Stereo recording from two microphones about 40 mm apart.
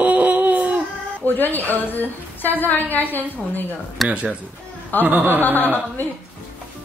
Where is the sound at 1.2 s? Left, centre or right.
Left.